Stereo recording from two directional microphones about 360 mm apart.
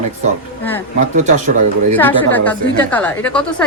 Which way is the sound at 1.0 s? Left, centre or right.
Centre.